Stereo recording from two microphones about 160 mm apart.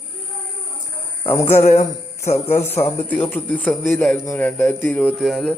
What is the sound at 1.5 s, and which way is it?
Speech, 45° left (ahead or behind).